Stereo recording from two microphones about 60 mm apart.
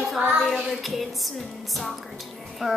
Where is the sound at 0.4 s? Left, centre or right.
Centre.